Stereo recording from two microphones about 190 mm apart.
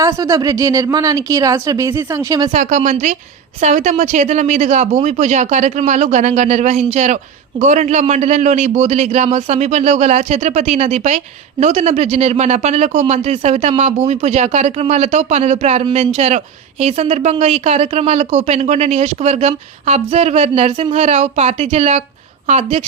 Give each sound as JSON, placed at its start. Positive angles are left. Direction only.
{"t": 0.0, "sound": "a woman's voice", "side_deg": -15}
{"t": 2.5, "sound": "speech", "side_deg": -40}